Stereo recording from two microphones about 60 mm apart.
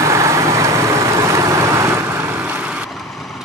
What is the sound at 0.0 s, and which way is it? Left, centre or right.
Vehicle, right.